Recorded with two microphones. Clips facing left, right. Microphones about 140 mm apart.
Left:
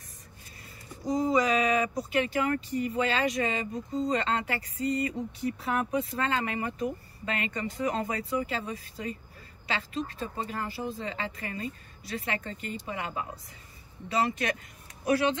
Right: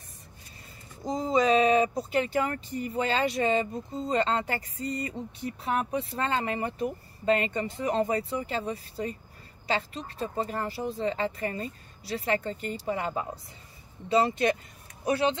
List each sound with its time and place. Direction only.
1.0 s speech: 25° right (ahead or behind)